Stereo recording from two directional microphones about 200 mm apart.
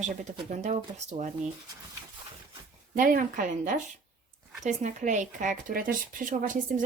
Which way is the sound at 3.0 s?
45° right (ahead or behind).